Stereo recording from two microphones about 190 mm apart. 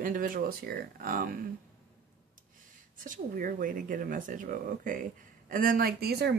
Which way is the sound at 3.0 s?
45° right (ahead or behind).